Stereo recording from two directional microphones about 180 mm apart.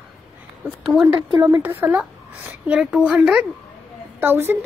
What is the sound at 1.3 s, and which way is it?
Speech, 25° right (ahead or behind).